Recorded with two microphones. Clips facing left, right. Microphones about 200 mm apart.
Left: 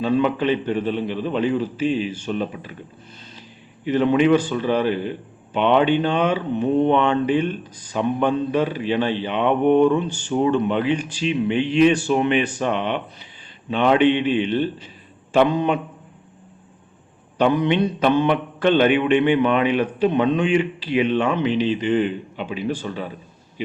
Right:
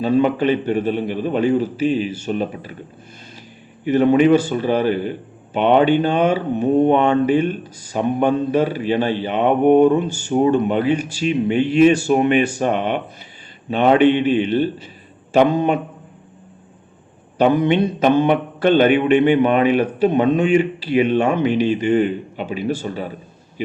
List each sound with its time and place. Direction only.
0.0 s mantra: 45° right (ahead or behind)
1.8 s speech: 40° right (ahead or behind)
2.2 s mantra: 45° right (ahead or behind)
3.8 s mantra: 45° right (ahead or behind)
10.1 s speech: 10° right (ahead or behind)
10.3 s mantra: 45° right (ahead or behind)
10.9 s speech: 10° right (ahead or behind)
11.2 s mantra: 45° right (ahead or behind)
17.3 s mantra: 50° right (ahead or behind)